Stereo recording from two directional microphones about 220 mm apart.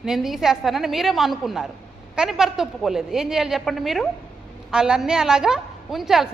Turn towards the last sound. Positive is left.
turn(degrees=0)  # may be behind; listen again after turning